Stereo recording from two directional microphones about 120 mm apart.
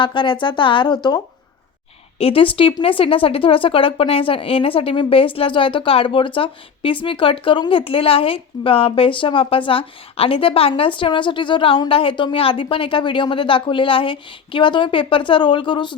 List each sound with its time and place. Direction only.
0.0 s speech: 45° left (ahead or behind)
2.1 s speech: 50° left (ahead or behind)